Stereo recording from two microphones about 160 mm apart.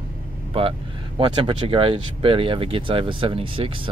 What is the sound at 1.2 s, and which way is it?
Speech, 35° right (ahead or behind).